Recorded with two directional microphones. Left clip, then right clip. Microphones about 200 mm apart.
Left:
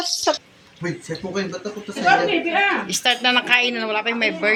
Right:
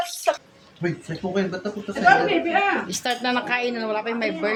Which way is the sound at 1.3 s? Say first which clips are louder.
Right 2 dB; 30° right (ahead or behind).